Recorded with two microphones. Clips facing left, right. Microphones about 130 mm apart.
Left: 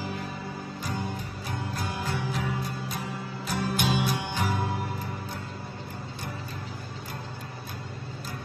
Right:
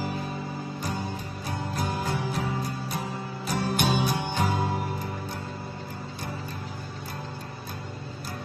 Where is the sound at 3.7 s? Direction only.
40° right (ahead or behind).